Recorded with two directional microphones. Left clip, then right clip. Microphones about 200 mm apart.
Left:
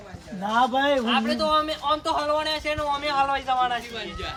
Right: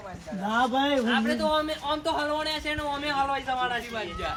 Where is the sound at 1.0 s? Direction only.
10° left (ahead or behind).